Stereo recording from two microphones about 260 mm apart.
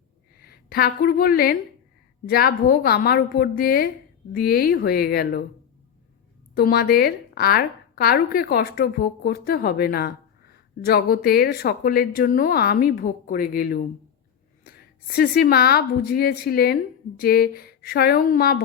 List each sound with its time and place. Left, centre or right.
0.3 s a woman's voice: left
6.6 s a woman's voice: left